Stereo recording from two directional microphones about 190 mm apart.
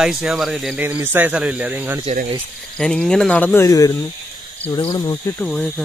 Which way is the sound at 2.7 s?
5° left (ahead or behind).